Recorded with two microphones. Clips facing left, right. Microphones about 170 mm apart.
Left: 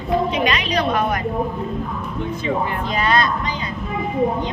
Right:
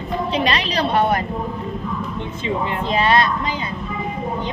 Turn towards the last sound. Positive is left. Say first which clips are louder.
# right 2 dB
turn(degrees=-25)  # may be behind; listen again after turning